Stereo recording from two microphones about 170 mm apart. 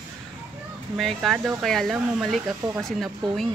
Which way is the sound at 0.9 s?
Centre (ahead or behind).